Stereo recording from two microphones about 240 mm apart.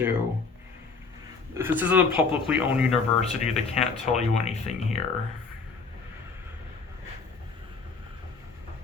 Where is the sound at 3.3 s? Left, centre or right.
Left.